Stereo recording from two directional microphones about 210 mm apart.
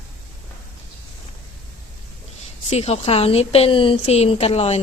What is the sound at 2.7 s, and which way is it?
A woman's voice, 30° left (ahead or behind).